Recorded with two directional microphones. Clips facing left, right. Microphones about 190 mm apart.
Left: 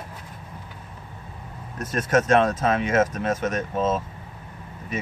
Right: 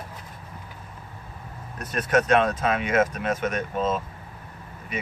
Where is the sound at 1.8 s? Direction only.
45° left (ahead or behind).